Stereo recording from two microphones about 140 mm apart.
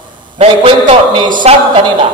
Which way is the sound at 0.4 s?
40° right (ahead or behind).